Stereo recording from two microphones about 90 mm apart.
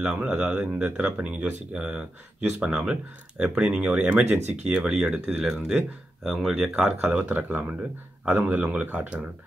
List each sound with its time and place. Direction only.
0.0 s speech: 10° right (ahead or behind)